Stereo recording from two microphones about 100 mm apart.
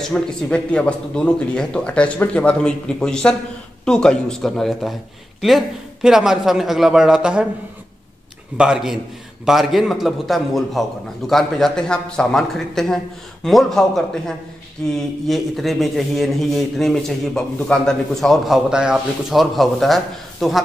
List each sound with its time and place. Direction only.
0.1 s a man's voice: 10° left (ahead or behind)
6.0 s a man's voice: 5° right (ahead or behind)
8.5 s a man's voice: 5° right (ahead or behind)